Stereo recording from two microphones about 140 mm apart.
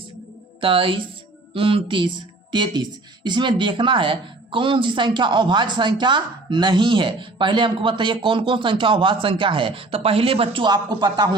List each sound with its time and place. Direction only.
0.6 s a woman's voice: 40° right (ahead or behind)